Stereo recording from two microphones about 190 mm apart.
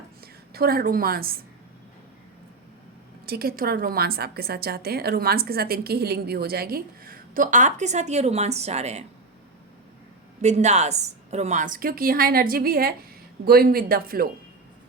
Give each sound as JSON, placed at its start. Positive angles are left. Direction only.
{"t": 0.5, "sound": "a woman's voice", "side_deg": -55}
{"t": 3.2, "sound": "a woman's voice", "side_deg": -55}
{"t": 10.4, "sound": "a woman's voice", "side_deg": -35}